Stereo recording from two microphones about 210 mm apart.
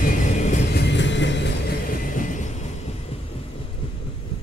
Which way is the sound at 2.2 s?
35° left (ahead or behind).